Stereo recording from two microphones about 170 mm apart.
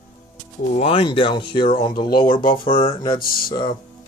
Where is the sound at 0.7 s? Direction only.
35° left (ahead or behind).